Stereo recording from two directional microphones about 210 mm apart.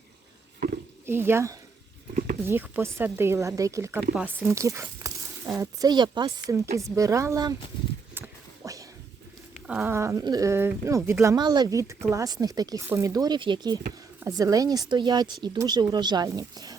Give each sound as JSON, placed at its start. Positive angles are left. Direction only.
{"t": 1.0, "sound": "speech", "side_deg": -10}
{"t": 8.6, "sound": "a sound", "side_deg": -15}
{"t": 9.6, "sound": "speech", "side_deg": -10}